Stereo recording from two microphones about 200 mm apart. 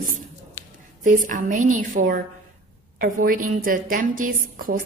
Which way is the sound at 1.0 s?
40° right (ahead or behind).